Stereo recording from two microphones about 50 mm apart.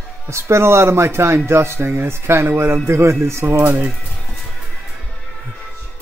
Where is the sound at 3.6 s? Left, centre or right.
Right.